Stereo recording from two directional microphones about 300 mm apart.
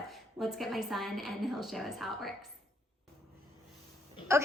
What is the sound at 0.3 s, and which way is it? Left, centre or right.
A woman's voice, centre.